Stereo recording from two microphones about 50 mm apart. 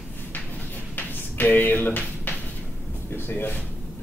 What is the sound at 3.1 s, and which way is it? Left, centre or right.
Speech, left.